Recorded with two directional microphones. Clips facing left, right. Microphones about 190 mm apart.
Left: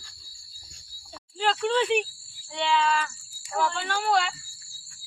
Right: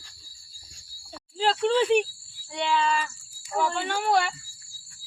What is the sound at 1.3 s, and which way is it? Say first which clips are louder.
Speech: right 2 dB; 30° right (ahead or behind).